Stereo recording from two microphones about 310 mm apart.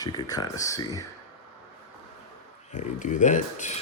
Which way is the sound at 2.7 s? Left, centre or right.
Left.